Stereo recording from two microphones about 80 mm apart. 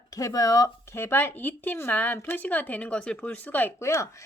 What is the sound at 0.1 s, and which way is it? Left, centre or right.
Speech, left.